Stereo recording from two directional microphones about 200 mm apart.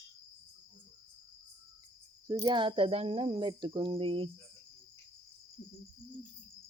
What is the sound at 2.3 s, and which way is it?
Speech, 25° right (ahead or behind).